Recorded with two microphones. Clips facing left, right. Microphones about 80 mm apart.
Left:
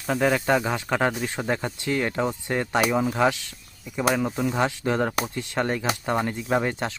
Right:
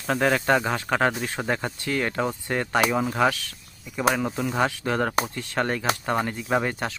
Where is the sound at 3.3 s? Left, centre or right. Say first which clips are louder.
Even; left.